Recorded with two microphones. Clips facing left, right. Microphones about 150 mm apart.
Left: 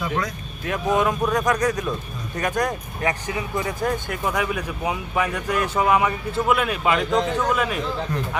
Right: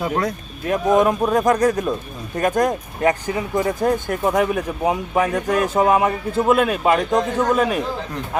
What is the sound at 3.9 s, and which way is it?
Speech, 50° right (ahead or behind).